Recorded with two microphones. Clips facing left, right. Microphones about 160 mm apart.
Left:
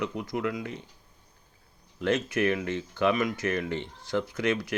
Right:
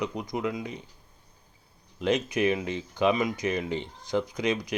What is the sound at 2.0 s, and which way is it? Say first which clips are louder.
Speech: right 1 dB; 15° right (ahead or behind).